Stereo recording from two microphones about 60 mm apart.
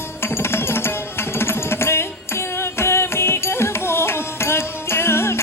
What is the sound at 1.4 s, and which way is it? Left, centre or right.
Music, left.